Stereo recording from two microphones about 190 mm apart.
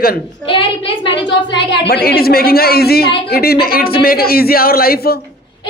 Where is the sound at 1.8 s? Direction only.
55° left (ahead or behind).